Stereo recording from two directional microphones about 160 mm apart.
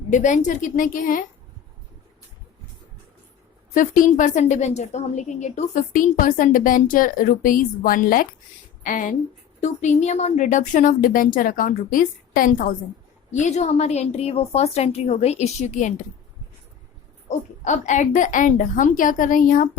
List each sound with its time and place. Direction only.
0.1 s a woman's voice: 50° left (ahead or behind)
3.8 s a woman's voice: 55° left (ahead or behind)
13.3 s a woman's voice: 45° left (ahead or behind)
17.2 s a woman's voice: 50° left (ahead or behind)